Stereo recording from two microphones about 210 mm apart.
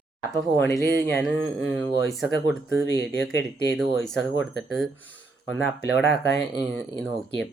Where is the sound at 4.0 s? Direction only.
5° left (ahead or behind).